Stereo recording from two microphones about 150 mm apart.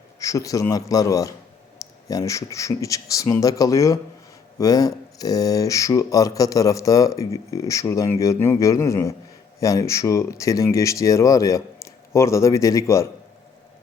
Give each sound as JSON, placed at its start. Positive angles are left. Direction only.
{"t": 0.2, "sound": "speech", "side_deg": 20}